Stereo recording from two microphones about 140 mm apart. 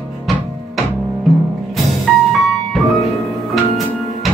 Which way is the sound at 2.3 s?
Centre (ahead or behind).